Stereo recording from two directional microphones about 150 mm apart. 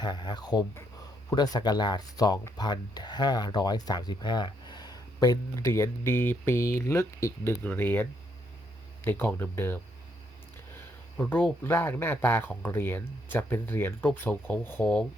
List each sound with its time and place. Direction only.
0.0 s speech: 30° left (ahead or behind); by 8.0 s 10° left (ahead or behind)
9.0 s speech: 15° left (ahead or behind)
11.2 s speech: 10° left (ahead or behind)